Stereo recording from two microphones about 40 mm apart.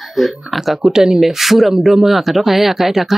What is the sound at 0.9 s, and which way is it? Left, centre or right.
Speech, centre.